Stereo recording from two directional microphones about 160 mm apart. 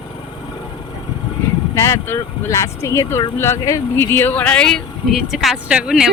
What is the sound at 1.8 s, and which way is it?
Speech, 15° left (ahead or behind).